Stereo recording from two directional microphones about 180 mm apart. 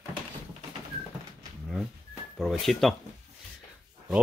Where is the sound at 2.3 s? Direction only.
Centre (ahead or behind).